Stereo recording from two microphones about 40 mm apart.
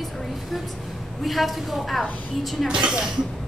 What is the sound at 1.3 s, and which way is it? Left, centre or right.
A woman's voice, centre.